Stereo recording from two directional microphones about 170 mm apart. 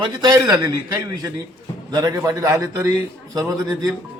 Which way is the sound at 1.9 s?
25° right (ahead or behind).